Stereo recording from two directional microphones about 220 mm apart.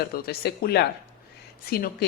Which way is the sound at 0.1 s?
45° left (ahead or behind).